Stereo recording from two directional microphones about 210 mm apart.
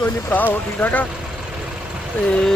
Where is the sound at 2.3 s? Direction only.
5° left (ahead or behind).